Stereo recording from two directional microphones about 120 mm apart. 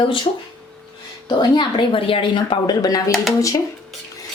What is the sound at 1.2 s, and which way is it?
Speech, 40° left (ahead or behind).